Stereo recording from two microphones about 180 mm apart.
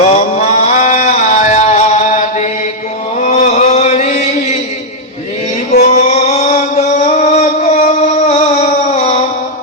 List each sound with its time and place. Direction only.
0.0 s a sound: 35° left (ahead or behind)
3.2 s chant: 40° left (ahead or behind)
5.8 s music: 40° left (ahead or behind)